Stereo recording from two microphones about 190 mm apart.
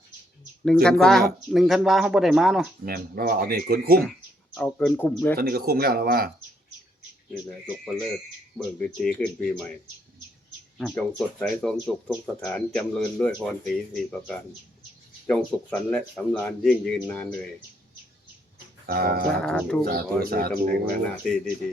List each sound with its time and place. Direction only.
0.6 s speech: 5° left (ahead or behind)
2.8 s speech: 50° right (ahead or behind)
4.5 s speech: 5° left (ahead or behind)
5.4 s speech: 55° right (ahead or behind)
8.5 s speech: 5° left (ahead or behind)
10.8 s speech: 5° left (ahead or behind)
18.9 s speech: 50° right (ahead or behind)
19.3 s speech: 5° left (ahead or behind)
19.8 s speech: 50° right (ahead or behind)